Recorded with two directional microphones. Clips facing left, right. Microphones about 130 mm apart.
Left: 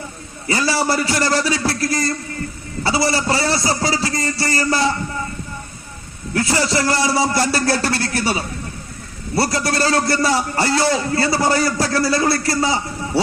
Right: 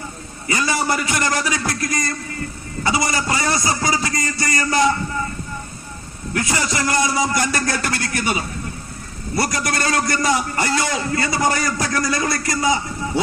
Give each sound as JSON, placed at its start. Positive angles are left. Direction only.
{"t": 0.4, "sound": "a man's voice", "side_deg": 30}
{"t": 6.3, "sound": "a man's voice", "side_deg": 30}